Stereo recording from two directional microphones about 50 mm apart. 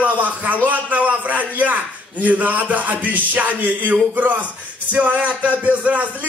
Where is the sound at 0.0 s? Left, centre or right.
Right.